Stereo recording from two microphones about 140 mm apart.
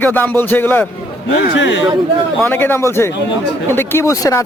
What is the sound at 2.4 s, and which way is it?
A man's voice, 15° left (ahead or behind).